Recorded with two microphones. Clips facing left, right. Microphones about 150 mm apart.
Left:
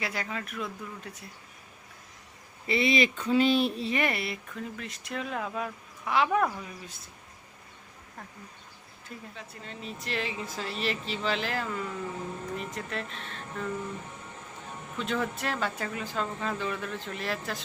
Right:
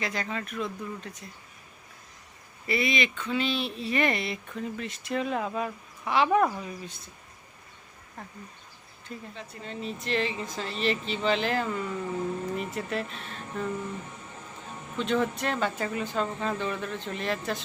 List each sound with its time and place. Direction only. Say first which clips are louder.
0.0 s speech: right 2 dB; 10° left (ahead or behind)
2.6 s speech: left 2 dB; 25° left (ahead or behind); by 3.8 s 45° left (ahead or behind)
3.9 s speech: right 2 dB; 10° left (ahead or behind)
9.0 s speech: right 3 dB; 5° left (ahead or behind)
14.9 s speech: right 4 dB; centre (ahead or behind)